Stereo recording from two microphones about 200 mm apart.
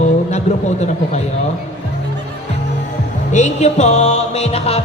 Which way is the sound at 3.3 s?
35° left (ahead or behind).